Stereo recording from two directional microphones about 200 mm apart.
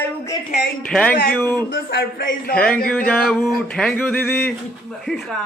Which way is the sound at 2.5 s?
5° left (ahead or behind).